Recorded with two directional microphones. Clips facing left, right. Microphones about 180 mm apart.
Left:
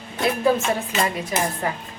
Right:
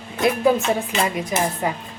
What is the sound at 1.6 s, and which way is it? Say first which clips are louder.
Speech: right 2 dB; 20° right (ahead or behind).